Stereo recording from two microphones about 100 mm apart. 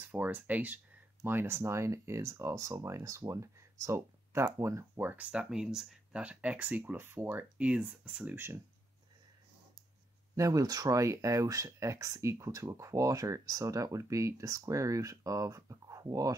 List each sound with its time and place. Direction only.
0.0 s speech: 20° right (ahead or behind)
7.5 s speech: 10° right (ahead or behind)
10.3 s speech: 35° right (ahead or behind)